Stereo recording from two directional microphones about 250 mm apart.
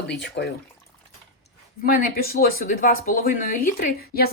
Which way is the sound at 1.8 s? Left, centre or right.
Left.